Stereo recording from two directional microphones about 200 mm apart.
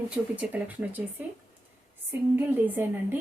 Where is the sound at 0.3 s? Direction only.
10° right (ahead or behind).